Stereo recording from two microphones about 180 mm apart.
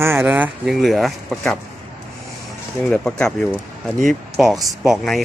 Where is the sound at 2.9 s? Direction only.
5° left (ahead or behind).